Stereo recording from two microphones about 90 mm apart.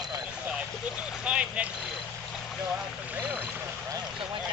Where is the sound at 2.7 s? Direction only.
15° right (ahead or behind).